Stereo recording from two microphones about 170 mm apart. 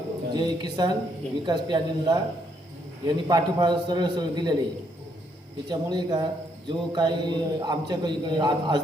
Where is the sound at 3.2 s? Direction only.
25° right (ahead or behind).